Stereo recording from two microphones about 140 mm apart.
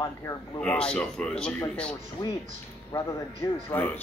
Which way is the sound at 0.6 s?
5° left (ahead or behind).